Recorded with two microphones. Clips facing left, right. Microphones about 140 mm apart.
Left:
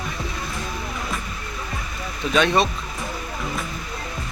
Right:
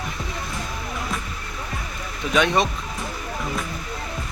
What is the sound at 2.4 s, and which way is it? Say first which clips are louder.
Speech: left 1 dB; 15° right (ahead or behind).